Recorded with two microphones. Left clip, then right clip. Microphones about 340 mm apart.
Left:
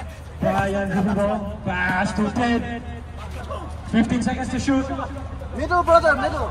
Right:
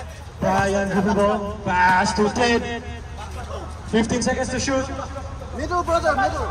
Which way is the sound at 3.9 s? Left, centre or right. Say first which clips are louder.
Right 2 dB; centre.